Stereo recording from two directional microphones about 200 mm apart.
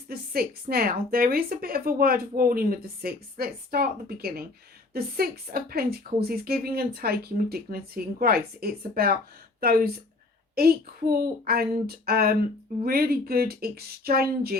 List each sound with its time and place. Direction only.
0.1 s speech: 50° right (ahead or behind)